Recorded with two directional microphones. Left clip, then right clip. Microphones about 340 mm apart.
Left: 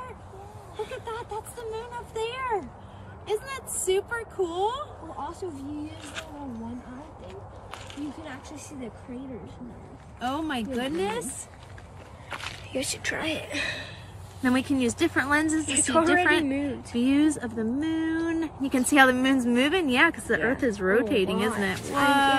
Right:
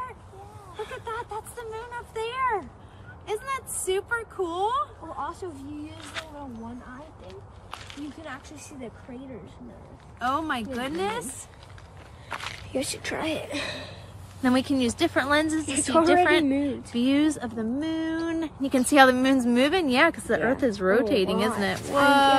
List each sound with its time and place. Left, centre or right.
0.7 s speech: centre
7.2 s speech: centre
10.2 s speech: centre
10.6 s a woman's voice: right
12.3 s walk: centre
12.7 s a woman's voice: right